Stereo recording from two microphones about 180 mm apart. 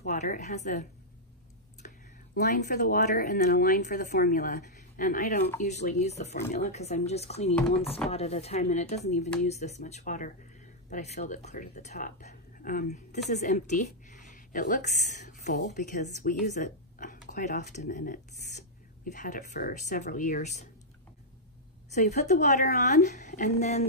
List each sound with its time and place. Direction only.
0.0 s a woman's voice: 45° left (ahead or behind)
1.8 s a sound: 50° left (ahead or behind)
2.3 s a woman's voice: 45° left (ahead or behind)
16.5 s a sound: 45° left (ahead or behind)
17.3 s speech: 40° left (ahead or behind)
21.9 s speech: 40° left (ahead or behind)